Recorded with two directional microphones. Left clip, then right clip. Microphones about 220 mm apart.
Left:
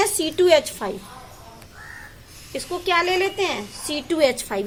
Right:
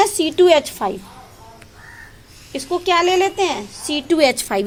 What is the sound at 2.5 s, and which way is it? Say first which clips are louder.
A woman's voice: right 4 dB; 35° right (ahead or behind).